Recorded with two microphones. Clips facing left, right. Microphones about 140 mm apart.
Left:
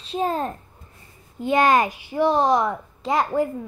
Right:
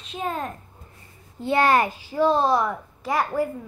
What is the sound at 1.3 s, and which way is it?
A child's voice, 15° left (ahead or behind).